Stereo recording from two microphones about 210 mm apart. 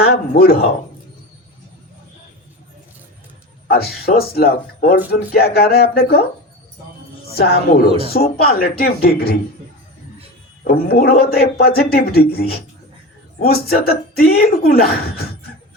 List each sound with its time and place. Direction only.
0.0 s a man's voice: 50° left (ahead or behind)
3.7 s a man's voice: 45° left (ahead or behind)
7.3 s a man's voice: 45° left (ahead or behind)
10.6 s a man's voice: 50° left (ahead or behind)